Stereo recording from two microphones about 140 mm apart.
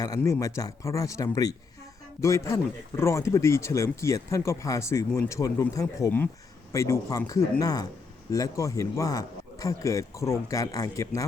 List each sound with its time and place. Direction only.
0.2 s a man's voice: 20° left (ahead or behind)